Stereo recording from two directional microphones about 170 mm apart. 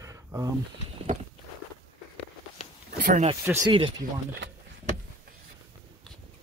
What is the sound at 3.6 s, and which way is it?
Speech, 30° right (ahead or behind).